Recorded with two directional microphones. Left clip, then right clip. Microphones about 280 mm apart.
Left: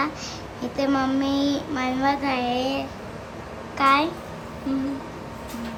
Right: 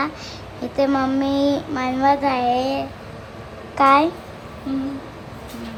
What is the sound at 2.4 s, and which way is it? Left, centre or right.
Speech, left.